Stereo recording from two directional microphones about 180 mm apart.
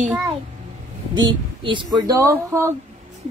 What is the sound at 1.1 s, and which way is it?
Speech, 25° right (ahead or behind).